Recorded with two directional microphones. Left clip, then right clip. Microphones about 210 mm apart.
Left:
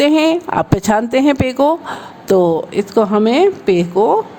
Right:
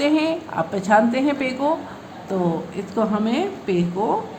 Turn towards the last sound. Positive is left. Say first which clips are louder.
# left 9 dB
turn(degrees=50)  # may be behind; listen again after turning